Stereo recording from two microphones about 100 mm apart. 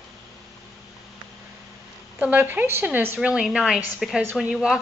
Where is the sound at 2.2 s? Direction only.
15° right (ahead or behind).